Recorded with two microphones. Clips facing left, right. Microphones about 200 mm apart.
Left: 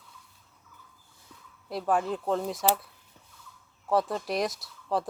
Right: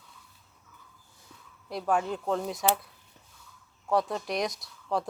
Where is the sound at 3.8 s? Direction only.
Centre (ahead or behind).